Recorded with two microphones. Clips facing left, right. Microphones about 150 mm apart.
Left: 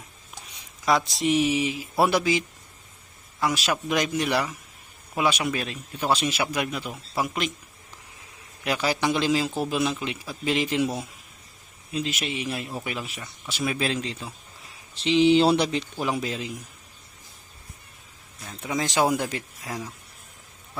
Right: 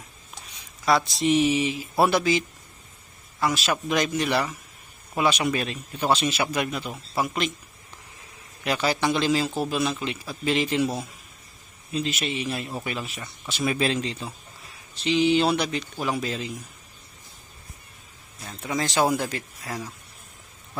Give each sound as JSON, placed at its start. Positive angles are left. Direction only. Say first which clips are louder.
{"t": 0.9, "sound": "a man's voice", "louder": "right 1 dB", "side_deg": 10}
{"t": 3.7, "sound": "a man's voice", "louder": "right 1 dB", "side_deg": 10}
{"t": 8.6, "sound": "a man's voice", "louder": "right 1 dB", "side_deg": 10}
{"t": 15.0, "sound": "speech", "louder": "left 3 dB", "side_deg": 25}
{"t": 16.0, "sound": "a man's voice", "louder": "right 2 dB", "side_deg": 15}
{"t": 18.8, "sound": "a man's voice", "louder": "even", "side_deg": 15}
{"t": 19.6, "sound": "speech", "louder": "right 1 dB", "side_deg": 5}